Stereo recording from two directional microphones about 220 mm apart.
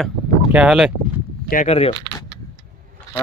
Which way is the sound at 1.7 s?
25° left (ahead or behind).